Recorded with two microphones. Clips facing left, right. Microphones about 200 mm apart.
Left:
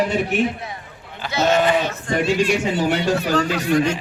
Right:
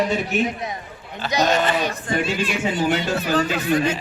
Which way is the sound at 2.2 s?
65° left (ahead or behind).